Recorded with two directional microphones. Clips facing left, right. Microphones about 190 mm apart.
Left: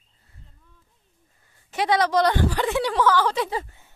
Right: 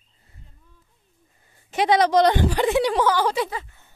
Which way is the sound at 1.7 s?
20° right (ahead or behind).